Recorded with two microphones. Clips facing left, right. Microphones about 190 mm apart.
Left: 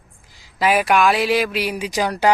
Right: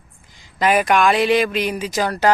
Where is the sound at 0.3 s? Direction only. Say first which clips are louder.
Right 1 dB; 5° left (ahead or behind).